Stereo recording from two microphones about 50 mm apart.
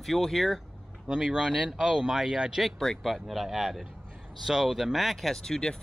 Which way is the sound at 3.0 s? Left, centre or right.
Centre.